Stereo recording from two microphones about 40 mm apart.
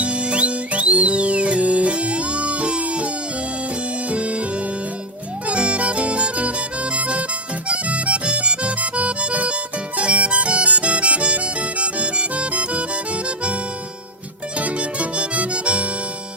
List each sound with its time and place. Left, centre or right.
0.0 s music: right
4.1 s music: right
5.5 s music: right
7.7 s accordion: right
10.0 s music: right
14.6 s music: right